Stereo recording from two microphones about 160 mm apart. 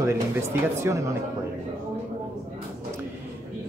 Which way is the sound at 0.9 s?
15° right (ahead or behind).